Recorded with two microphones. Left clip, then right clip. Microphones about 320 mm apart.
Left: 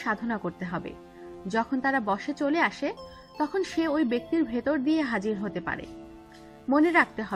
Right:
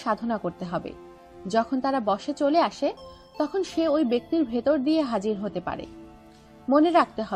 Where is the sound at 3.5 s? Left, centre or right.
Centre.